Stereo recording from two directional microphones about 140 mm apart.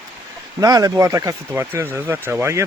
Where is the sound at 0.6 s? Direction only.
25° right (ahead or behind).